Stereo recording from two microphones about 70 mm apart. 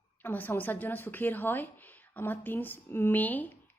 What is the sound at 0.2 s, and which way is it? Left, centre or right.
A woman's voice, left.